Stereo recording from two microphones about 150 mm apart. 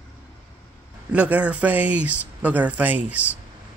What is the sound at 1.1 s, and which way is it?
Speech, 10° right (ahead or behind).